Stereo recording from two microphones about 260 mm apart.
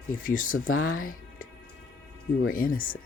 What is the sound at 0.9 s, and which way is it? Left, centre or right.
Music, left.